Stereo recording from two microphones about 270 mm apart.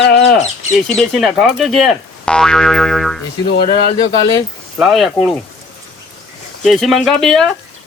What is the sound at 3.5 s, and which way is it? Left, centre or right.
Speech, left.